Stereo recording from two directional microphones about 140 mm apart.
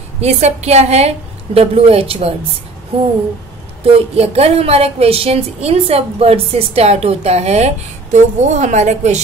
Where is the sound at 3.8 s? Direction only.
45° right (ahead or behind).